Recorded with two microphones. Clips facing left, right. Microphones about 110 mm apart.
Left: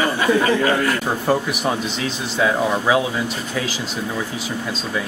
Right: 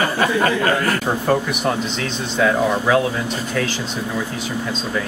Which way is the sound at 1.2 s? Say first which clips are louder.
Even; 5° left (ahead or behind).